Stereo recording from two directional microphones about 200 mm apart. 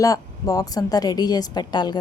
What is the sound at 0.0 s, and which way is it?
A woman's voice, 15° left (ahead or behind).